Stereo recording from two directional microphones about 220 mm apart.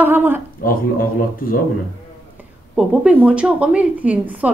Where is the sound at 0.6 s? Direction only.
40° left (ahead or behind).